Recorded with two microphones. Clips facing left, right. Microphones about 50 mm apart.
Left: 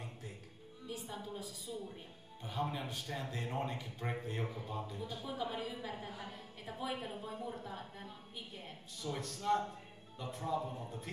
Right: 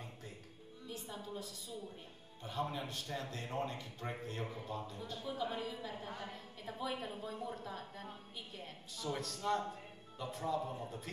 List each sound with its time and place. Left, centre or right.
0.8 s music: centre
2.4 s a woman's voice: centre